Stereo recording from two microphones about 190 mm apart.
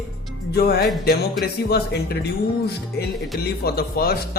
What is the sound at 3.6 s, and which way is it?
Speech, 55° left (ahead or behind).